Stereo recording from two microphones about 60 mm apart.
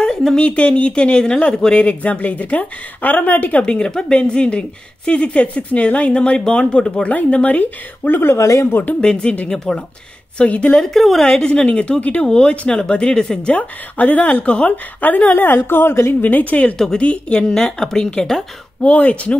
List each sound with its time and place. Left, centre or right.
0.0 s a sound: centre
0.4 s speech: left
3.6 s speech: centre; by 8.5 s left
8.5 s speech: left
9.0 s a woman's voice: centre
10.8 s a woman's voice: centre
13.5 s a woman's voice: left
16.2 s speech: left
16.7 s a woman's voice: centre
18.8 s speech: left